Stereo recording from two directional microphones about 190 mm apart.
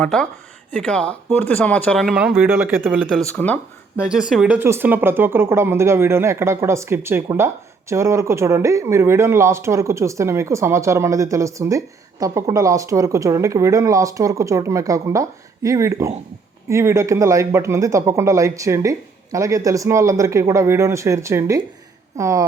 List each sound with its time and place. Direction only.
0.0 s speech: 5° left (ahead or behind)
3.9 s speech: 5° right (ahead or behind)